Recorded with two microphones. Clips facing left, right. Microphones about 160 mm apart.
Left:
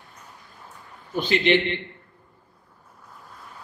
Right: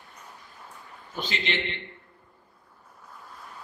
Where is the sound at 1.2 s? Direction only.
60° left (ahead or behind).